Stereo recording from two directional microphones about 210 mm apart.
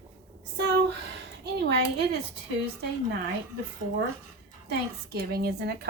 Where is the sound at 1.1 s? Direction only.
55° right (ahead or behind).